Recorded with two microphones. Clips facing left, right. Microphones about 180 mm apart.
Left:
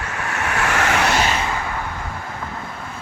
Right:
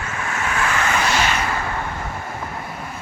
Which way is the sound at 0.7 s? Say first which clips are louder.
Left 4 dB; 75° left (ahead or behind).